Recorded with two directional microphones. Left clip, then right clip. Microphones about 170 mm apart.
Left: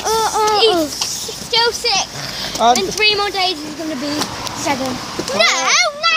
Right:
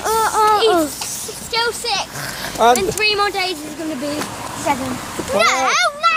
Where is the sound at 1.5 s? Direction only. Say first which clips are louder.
Left 4 dB; centre (ahead or behind).